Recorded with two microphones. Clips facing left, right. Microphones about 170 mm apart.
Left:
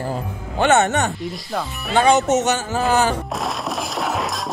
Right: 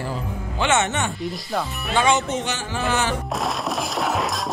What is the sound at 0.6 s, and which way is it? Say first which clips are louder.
Speech: left 5 dB; 40° left (ahead or behind).